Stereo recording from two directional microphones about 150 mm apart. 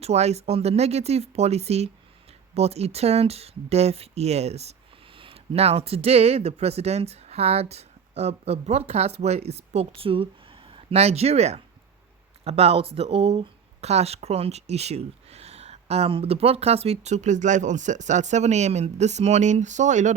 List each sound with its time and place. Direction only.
0.0 s speech: 45° right (ahead or behind)